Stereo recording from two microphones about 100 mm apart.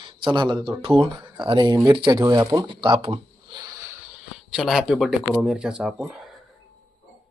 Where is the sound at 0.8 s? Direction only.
65° right (ahead or behind).